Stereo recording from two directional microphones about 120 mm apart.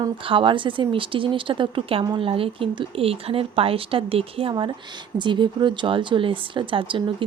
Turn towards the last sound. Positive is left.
turn(degrees=-45)  # may be behind; listen again after turning